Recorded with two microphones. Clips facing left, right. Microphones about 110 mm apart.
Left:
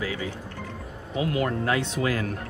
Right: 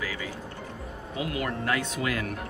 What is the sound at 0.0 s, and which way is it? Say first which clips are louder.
Music: left 4 dB; 25° left (ahead or behind).